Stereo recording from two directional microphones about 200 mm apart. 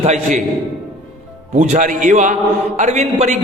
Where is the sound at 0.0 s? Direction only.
35° right (ahead or behind).